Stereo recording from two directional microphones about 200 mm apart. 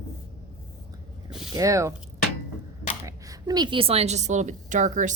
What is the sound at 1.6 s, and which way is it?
Speech, 15° right (ahead or behind).